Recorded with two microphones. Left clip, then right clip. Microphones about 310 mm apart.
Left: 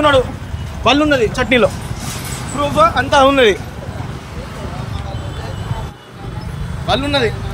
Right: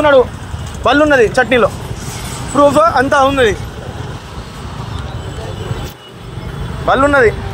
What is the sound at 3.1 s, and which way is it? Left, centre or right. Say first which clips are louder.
Speech: even; centre.